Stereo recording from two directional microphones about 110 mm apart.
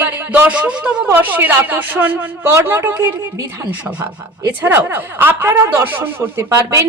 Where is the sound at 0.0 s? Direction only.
15° right (ahead or behind).